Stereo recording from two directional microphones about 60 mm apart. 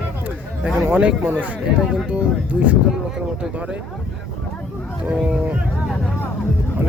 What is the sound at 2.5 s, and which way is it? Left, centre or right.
Speech, centre.